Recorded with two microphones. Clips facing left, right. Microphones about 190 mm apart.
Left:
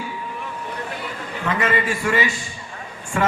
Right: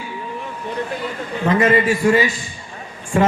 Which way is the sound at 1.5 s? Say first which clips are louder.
Right 7 dB; 40° right (ahead or behind).